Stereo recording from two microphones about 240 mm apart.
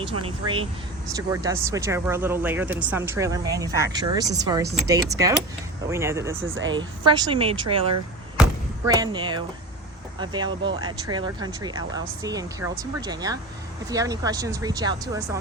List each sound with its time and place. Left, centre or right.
0.0 s speech: right
6.4 s speech: right
6.7 s speech: centre
8.4 s a sound: centre
10.2 s speech: centre